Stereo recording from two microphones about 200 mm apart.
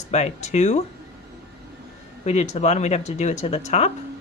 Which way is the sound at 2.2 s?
35° left (ahead or behind).